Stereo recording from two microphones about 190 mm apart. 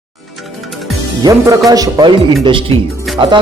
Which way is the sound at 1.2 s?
20° right (ahead or behind).